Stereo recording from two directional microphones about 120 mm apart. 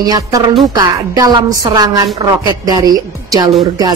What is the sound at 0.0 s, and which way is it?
Speech, 30° right (ahead or behind).